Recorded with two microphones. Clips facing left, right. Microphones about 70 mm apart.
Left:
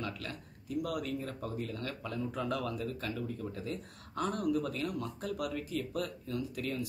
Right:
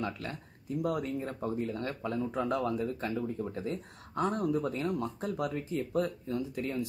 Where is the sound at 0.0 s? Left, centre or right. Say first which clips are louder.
Right 4 dB; right.